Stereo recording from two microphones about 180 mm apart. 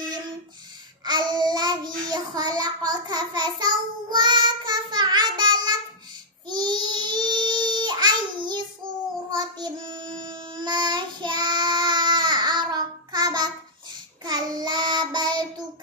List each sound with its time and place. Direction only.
1.0 s child singing: 25° right (ahead or behind)
6.5 s babbling: 25° right (ahead or behind)
9.3 s child singing: 25° right (ahead or behind)